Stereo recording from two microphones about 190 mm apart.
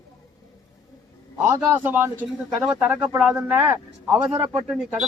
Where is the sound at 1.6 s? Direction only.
10° right (ahead or behind).